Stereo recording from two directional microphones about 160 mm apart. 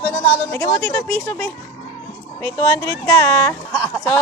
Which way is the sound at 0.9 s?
15° left (ahead or behind).